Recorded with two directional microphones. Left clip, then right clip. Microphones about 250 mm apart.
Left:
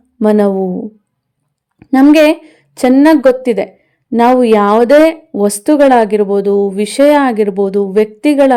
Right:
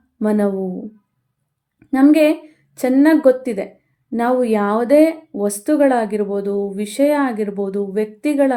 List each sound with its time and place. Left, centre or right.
0.2 s speech: left
1.8 s a woman's voice: left